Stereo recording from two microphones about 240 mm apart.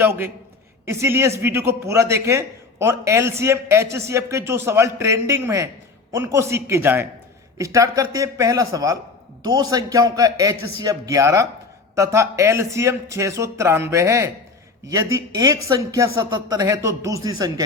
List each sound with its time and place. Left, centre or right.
0.0 s a man's voice: centre